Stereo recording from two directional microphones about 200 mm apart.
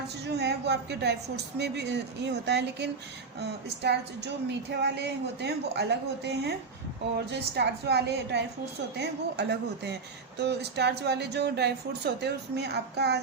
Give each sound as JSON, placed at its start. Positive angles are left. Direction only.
{"t": 0.3, "sound": "speech", "side_deg": -55}